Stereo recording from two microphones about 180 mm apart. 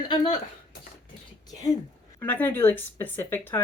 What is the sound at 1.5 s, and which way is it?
A woman's voice, 20° left (ahead or behind).